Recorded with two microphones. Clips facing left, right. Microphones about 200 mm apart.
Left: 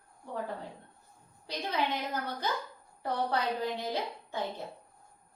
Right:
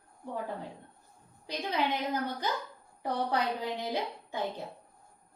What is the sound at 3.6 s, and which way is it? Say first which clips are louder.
Speech: even; 15° right (ahead or behind).